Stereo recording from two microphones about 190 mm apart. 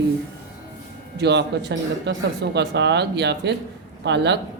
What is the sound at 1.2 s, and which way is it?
Speech, 65° right (ahead or behind).